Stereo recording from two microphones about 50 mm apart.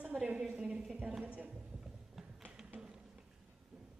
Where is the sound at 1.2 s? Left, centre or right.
Right.